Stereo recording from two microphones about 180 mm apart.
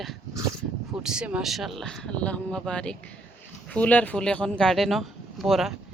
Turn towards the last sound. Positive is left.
turn(degrees=0)  # may be behind; listen again after turning